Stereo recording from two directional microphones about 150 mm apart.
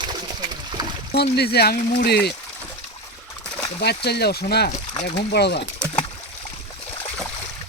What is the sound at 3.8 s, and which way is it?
Speech, 90° left.